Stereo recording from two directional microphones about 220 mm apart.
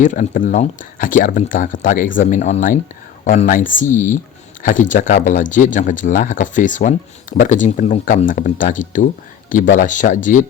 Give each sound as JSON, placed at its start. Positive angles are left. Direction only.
{"t": 0.0, "sound": "speech", "side_deg": 35}
{"t": 3.8, "sound": "speech", "side_deg": 10}
{"t": 4.6, "sound": "speech", "side_deg": 35}